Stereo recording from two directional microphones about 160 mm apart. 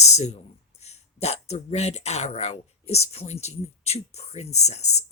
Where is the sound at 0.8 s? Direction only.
40° left (ahead or behind).